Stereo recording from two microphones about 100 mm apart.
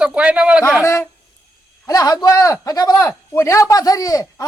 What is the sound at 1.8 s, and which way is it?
A man's voice, 35° left (ahead or behind).